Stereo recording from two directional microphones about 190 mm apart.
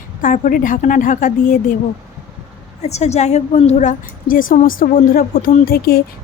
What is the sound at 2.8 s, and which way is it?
A woman's voice, 35° left (ahead or behind).